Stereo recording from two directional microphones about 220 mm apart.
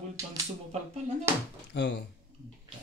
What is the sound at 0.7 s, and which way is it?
Speech, 30° right (ahead or behind).